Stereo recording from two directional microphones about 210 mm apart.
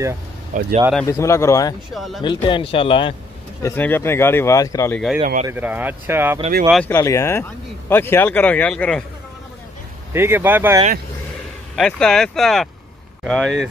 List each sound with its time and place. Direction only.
0.5 s speech: 35° right (ahead or behind)
1.0 s speech: 15° left (ahead or behind)
2.0 s speech: centre (ahead or behind)
2.2 s speech: 25° left (ahead or behind)
3.6 s speech: 10° left (ahead or behind)
4.9 s speech: centre (ahead or behind)
5.2 s speech: 35° right (ahead or behind)
5.5 s speech: 10° right (ahead or behind)
6.7 s speech: 10° left (ahead or behind)
10.1 s speech: 10° right (ahead or behind)
11.7 s speech: 5° left (ahead or behind)